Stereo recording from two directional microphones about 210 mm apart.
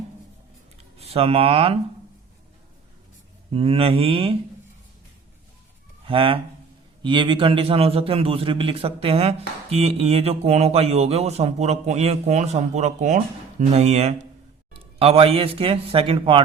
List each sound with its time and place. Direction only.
0.9 s speech: 30° right (ahead or behind)
3.5 s a man's voice: 25° right (ahead or behind)
6.1 s a man's voice: 25° right (ahead or behind)